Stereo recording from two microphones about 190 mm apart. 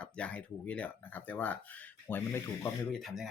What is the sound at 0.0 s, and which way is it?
Speech, 5° left (ahead or behind).